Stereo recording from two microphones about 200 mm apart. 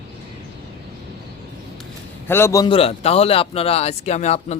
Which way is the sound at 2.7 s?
30° left (ahead or behind).